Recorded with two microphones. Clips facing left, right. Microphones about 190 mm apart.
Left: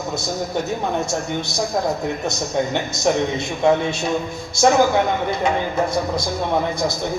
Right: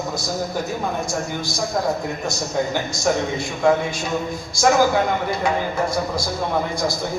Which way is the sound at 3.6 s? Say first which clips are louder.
Left 1 dB; 20° left (ahead or behind).